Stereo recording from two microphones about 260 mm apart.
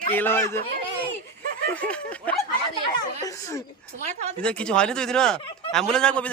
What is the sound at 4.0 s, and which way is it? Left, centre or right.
Speech, right.